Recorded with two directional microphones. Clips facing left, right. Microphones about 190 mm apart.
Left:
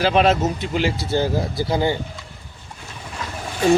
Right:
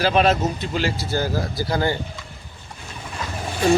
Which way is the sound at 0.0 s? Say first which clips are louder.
Left 1 dB; 20° left (ahead or behind).